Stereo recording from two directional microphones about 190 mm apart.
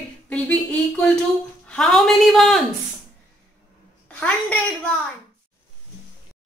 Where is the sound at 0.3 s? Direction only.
5° left (ahead or behind).